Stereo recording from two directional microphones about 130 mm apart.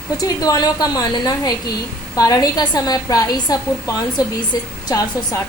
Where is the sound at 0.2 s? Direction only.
30° left (ahead or behind).